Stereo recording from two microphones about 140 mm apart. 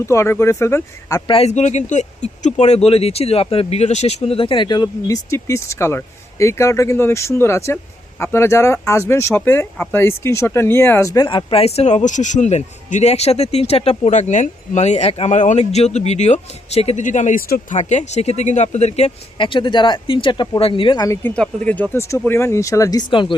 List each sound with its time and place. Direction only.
0.0 s speech: 20° left (ahead or behind)
1.3 s speech: 50° left (ahead or behind); by 11.3 s 25° left (ahead or behind)
11.3 s speech: 35° left (ahead or behind); by 17.7 s 75° left (ahead or behind)
17.7 s speech: 55° left (ahead or behind)
19.4 s speech: 35° left (ahead or behind)
21.2 s speech: 10° left (ahead or behind); by 23.3 s 35° left (ahead or behind)